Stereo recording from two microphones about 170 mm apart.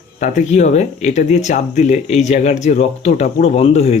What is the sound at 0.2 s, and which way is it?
Speech, 45° left (ahead or behind).